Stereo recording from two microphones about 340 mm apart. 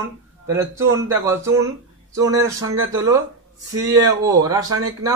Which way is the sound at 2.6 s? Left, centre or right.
Right.